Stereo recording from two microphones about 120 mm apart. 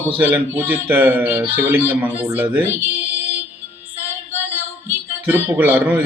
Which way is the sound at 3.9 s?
20° left (ahead or behind).